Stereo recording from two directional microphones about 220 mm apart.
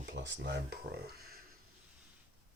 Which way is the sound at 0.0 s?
50° right (ahead or behind).